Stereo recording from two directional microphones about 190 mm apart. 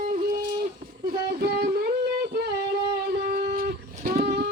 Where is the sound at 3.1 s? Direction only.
55° right (ahead or behind).